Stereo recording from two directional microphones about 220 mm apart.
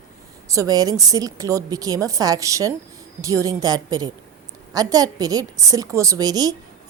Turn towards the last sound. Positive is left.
turn(degrees=-15)  # may be behind; listen again after turning